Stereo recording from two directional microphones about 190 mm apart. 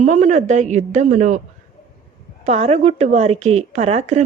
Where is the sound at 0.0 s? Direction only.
40° right (ahead or behind).